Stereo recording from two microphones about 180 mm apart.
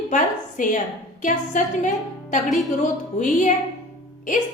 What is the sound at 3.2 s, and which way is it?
Speech, 45° left (ahead or behind).